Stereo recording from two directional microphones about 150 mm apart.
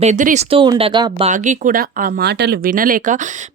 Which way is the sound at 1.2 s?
55° right (ahead or behind).